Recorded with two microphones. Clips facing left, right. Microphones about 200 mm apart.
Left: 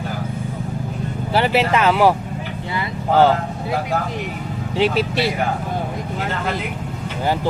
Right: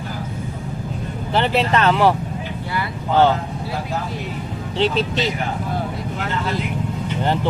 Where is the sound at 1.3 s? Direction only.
10° left (ahead or behind).